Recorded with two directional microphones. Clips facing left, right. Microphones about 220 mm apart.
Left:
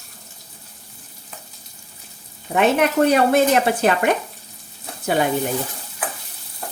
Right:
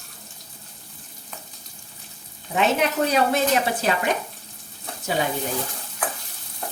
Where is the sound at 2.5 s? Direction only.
55° left (ahead or behind).